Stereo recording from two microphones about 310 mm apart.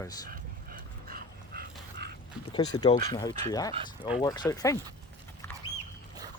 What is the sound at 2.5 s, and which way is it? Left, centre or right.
Speech, centre.